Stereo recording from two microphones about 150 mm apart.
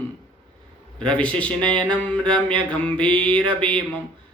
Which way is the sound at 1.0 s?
10° left (ahead or behind).